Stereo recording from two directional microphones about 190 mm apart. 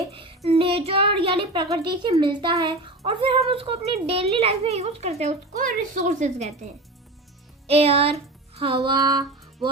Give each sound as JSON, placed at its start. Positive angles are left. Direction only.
{"t": 0.1, "sound": "child singing", "side_deg": -30}
{"t": 0.9, "sound": "a child's voice", "side_deg": -30}
{"t": 7.7, "sound": "music", "side_deg": -30}
{"t": 9.0, "sound": "music", "side_deg": -20}